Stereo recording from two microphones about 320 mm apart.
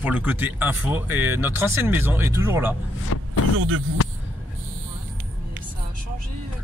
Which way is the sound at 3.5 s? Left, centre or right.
Right.